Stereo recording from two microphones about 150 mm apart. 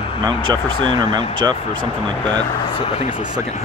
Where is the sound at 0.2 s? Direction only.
30° right (ahead or behind).